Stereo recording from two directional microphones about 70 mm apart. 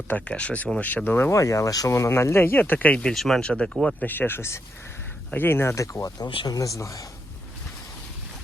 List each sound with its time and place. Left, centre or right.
0.1 s speech: centre
1.3 s speech: left
1.9 s speech: left
3.0 s speech: centre
4.0 s speech: left
5.7 s speech: left
6.1 s speech: left
6.6 s speech: left